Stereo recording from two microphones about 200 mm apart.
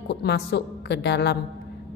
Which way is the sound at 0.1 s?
55° left (ahead or behind).